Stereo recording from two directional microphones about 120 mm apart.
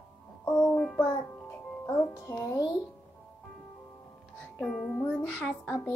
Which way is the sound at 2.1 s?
25° left (ahead or behind).